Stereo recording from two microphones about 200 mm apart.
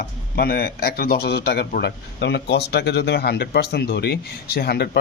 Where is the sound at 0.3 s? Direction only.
50° left (ahead or behind).